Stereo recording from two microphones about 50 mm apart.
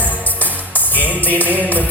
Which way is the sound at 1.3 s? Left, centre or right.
Left.